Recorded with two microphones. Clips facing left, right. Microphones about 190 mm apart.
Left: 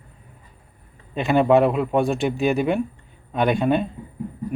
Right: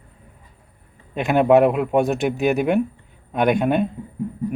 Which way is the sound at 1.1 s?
10° right (ahead or behind).